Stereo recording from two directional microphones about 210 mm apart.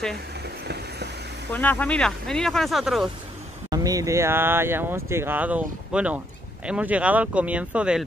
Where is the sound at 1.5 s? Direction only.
10° left (ahead or behind).